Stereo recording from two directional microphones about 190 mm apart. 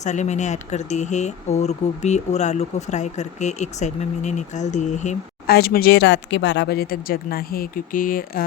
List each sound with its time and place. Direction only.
0.0 s speech: 40° left (ahead or behind)
5.5 s speech: 55° left (ahead or behind)